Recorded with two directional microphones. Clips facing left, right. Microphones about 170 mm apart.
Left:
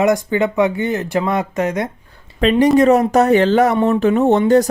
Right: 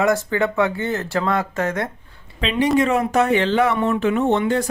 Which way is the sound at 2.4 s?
45° left (ahead or behind).